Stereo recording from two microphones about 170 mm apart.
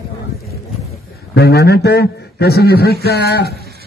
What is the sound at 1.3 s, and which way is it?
A man's voice, 70° left (ahead or behind).